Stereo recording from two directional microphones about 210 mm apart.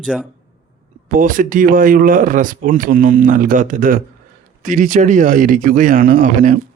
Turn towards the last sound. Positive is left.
turn(degrees=-40)  # may be behind; listen again after turning